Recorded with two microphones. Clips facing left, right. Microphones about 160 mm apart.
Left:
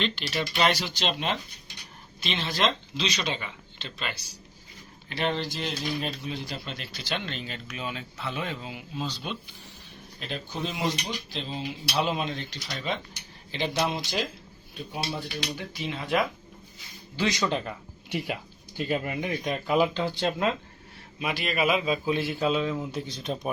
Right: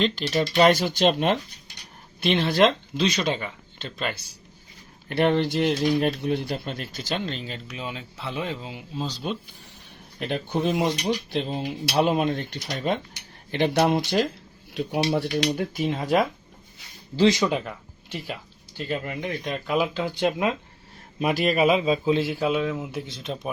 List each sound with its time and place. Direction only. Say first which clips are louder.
0.0 s speech: right 6 dB; 40° right (ahead or behind)
5.0 s speech: right 8 dB; 55° right (ahead or behind); by 9.4 s 40° right (ahead or behind)
10.2 s speech: right 7 dB; 60° right (ahead or behind)
14.7 s speech: right 10 dB; 80° right
15.5 s speech: right 8 dB; 50° right (ahead or behind)
17.2 s speech: right 8 dB; 25° right (ahead or behind)
18.8 s speech: left 1 dB; 10° left (ahead or behind); by 20.5 s 15° right (ahead or behind)
21.2 s a man's voice: right 7 dB; 45° right (ahead or behind); by 23.5 s centre (ahead or behind)